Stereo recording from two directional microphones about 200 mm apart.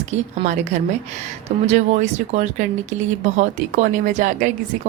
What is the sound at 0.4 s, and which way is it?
A woman's voice, 35° right (ahead or behind).